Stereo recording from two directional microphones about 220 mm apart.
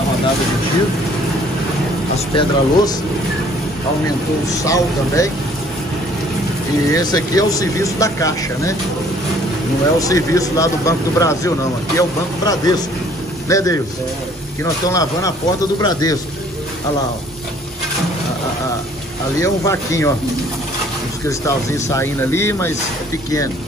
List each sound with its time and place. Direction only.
2.1 s speech: 25° left (ahead or behind)
4.5 s speech: 15° left (ahead or behind)
6.9 s speech: 15° left (ahead or behind)
9.9 s speech: 15° left (ahead or behind)
19.4 s speech: 15° left (ahead or behind)
21.3 s speech: 15° left (ahead or behind)